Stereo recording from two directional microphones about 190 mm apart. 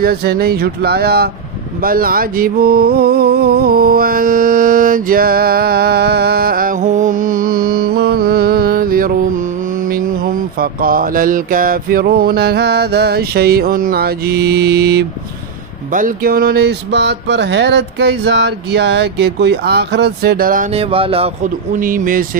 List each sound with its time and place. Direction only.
0.0 s mantra: 55° right (ahead or behind)
1.8 s a sound: 50° right (ahead or behind)
9.8 s mantra: 50° right (ahead or behind)
15.9 s mantra: 50° right (ahead or behind)
20.7 s speech: 30° right (ahead or behind)
21.7 s speech: 45° right (ahead or behind)